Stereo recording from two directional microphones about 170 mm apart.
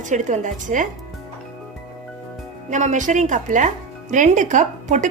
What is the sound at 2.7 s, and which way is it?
Speech, 45° right (ahead or behind).